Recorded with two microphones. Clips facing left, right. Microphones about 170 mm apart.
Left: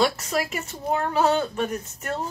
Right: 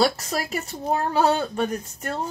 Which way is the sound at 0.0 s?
40° right (ahead or behind).